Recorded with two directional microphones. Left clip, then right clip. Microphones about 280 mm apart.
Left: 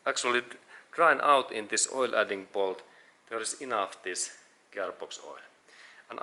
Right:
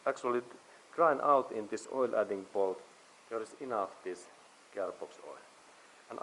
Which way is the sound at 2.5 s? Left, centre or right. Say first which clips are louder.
Left 2 dB; right.